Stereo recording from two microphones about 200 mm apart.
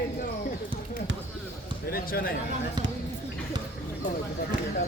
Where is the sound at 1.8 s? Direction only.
45° left (ahead or behind).